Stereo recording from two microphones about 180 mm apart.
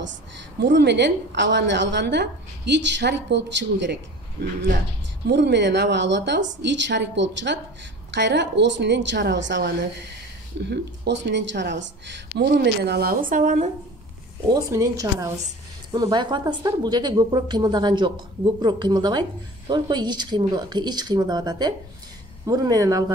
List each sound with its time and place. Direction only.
0.6 s a woman's voice: 75° right (ahead or behind)
5.2 s a woman's voice: 75° right (ahead or behind); by 13.7 s 45° right (ahead or behind)
14.5 s a woman's voice: 20° right (ahead or behind)